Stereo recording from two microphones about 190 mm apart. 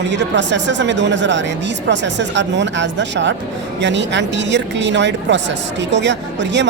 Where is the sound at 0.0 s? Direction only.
70° right (ahead or behind).